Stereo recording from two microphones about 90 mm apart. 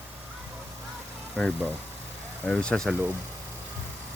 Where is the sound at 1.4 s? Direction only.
10° left (ahead or behind).